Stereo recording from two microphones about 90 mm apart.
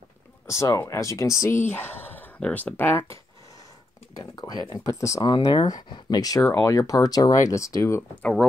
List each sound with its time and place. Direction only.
0.5 s speech: 35° left (ahead or behind)
1.4 s bow-wow: 25° left (ahead or behind)
2.4 s speech: 15° left (ahead or behind)
4.2 s speech: 50° left (ahead or behind)
4.7 s speech: 35° left (ahead or behind)
5.5 s speech: 50° left (ahead or behind)
6.4 s speech: 30° left (ahead or behind)
8.2 s speech: 10° left (ahead or behind)